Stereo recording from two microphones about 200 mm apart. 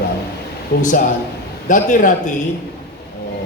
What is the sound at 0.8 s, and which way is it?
Speech, 40° left (ahead or behind).